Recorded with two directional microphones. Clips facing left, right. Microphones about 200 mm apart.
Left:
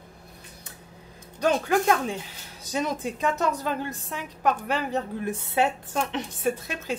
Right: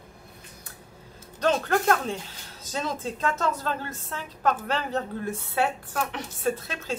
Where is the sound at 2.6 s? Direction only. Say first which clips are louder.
Left 3 dB; 15° left (ahead or behind).